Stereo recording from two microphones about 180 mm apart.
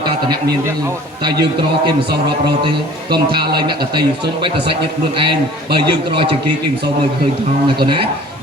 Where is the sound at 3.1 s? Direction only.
60° right (ahead or behind).